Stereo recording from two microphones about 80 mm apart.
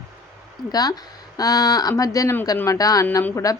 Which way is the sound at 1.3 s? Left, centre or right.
Left.